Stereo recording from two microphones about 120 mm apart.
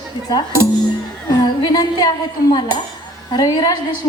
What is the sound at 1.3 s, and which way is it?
A woman's voice, 35° left (ahead or behind).